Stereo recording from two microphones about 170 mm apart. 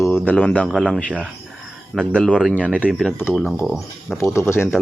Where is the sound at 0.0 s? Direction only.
10° left (ahead or behind).